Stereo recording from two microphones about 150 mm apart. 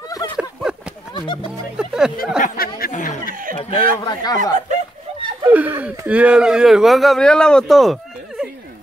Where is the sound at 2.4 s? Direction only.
70° left (ahead or behind).